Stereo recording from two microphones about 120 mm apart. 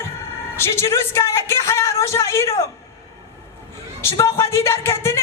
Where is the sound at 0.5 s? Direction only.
20° left (ahead or behind).